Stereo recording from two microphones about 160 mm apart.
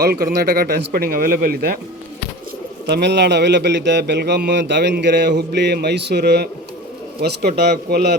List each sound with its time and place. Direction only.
0.0 s speech: 75° right (ahead or behind)
2.9 s a man's voice: 90° right